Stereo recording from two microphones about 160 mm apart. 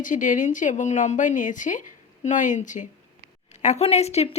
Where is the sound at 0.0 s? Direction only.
55° left (ahead or behind).